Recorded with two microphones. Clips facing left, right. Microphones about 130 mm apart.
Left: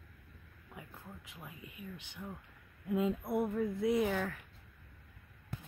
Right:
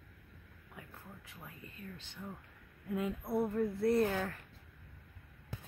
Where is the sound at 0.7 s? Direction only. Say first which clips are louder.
Left 2 dB; 20° left (ahead or behind).